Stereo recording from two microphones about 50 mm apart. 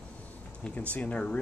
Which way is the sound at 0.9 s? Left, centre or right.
Left.